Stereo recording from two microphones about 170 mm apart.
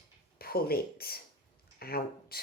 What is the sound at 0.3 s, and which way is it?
Speech, 65° left (ahead or behind).